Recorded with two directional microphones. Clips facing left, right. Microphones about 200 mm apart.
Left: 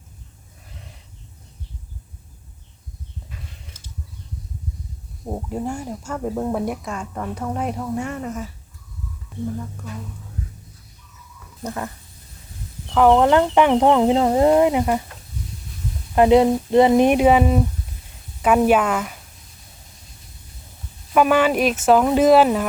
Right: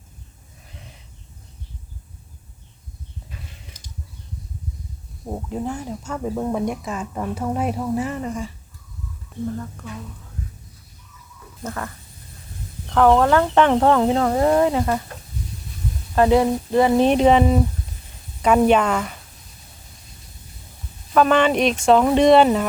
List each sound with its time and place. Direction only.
3.7 s a sound: 15° right (ahead or behind)
5.3 s speech: 10° left (ahead or behind)
11.6 s speech: 20° left (ahead or behind)
12.9 s speech: 10° left (ahead or behind)
16.1 s speech: 20° left (ahead or behind)
21.1 s speech: 10° left (ahead or behind)